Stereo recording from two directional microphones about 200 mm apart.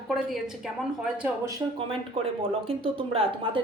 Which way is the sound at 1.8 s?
30° right (ahead or behind).